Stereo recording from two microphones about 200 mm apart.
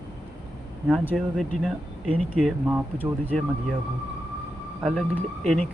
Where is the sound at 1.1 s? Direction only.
Centre (ahead or behind).